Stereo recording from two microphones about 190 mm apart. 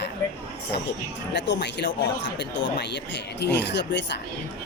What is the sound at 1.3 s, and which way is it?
Speech, 65° left (ahead or behind).